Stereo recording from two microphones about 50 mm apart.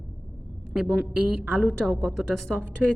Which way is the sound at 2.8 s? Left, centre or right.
Centre.